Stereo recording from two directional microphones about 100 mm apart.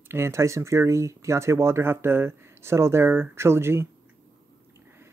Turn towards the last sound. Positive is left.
turn(degrees=-25)  # may be behind; listen again after turning